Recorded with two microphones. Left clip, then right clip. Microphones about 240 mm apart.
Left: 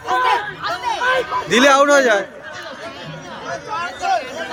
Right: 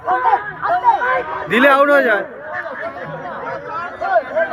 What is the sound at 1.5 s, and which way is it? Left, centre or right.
Speech, centre.